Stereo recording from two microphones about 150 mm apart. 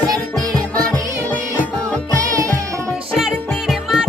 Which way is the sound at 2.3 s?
20° right (ahead or behind).